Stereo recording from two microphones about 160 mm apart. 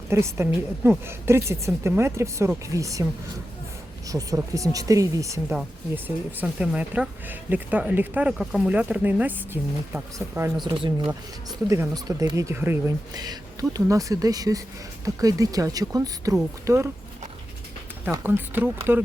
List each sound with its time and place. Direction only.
0.1 s speech: 15° right (ahead or behind)
4.1 s speech: 20° right (ahead or behind)
10.8 s speech: 30° right (ahead or behind)
18.0 s speech: 10° right (ahead or behind)